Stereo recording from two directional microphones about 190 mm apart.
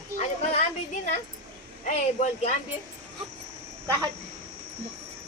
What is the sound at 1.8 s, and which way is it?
Speech, 40° left (ahead or behind).